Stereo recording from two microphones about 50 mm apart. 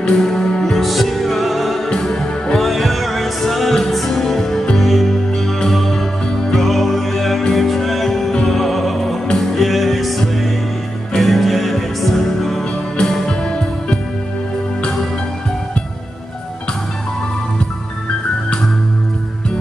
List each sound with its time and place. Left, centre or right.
0.1 s music: centre
0.7 s music: centre
13.4 s music: centre